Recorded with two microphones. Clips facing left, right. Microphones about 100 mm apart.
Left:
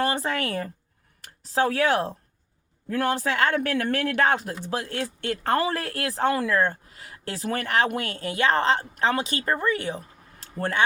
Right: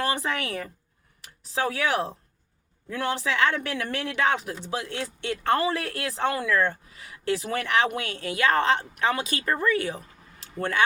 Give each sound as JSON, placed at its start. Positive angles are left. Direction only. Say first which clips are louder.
{"t": 0.0, "sound": "speech", "louder": "left 2 dB", "side_deg": 35}